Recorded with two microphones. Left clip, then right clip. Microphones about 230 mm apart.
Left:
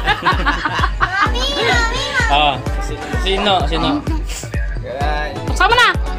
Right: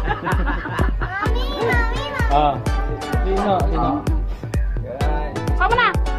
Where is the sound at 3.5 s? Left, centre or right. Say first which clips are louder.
Left 4 dB; centre.